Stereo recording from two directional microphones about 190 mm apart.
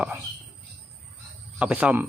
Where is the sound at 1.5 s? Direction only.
5° right (ahead or behind).